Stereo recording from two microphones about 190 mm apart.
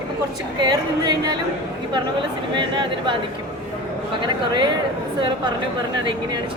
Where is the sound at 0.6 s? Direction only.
20° right (ahead or behind).